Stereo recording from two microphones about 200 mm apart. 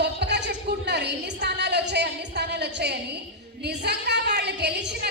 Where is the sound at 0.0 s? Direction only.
55° right (ahead or behind).